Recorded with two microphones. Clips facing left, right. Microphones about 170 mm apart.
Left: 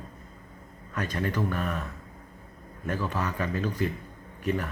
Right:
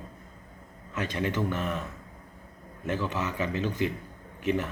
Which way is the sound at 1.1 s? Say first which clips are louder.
Even; 20° right (ahead or behind).